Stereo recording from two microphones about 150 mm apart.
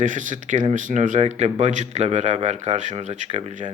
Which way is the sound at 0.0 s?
60° right (ahead or behind).